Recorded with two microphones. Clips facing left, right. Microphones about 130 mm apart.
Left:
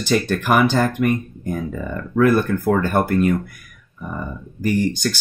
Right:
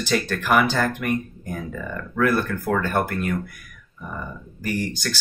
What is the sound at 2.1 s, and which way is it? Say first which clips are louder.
Speech: left 6 dB; 25° left (ahead or behind).